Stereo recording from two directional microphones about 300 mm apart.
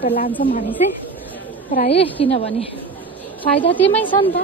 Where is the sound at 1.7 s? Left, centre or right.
Centre.